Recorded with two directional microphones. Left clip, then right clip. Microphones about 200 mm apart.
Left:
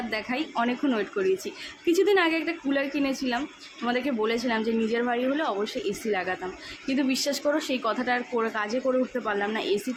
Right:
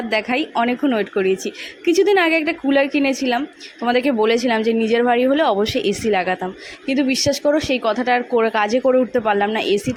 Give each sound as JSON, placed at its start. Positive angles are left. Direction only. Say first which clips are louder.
{"t": 0.1, "sound": "speech", "louder": "right 13 dB", "side_deg": -35}